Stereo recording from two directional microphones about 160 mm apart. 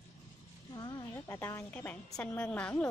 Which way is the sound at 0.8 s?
20° left (ahead or behind).